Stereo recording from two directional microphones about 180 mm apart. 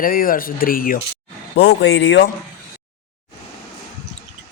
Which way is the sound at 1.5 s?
80° left.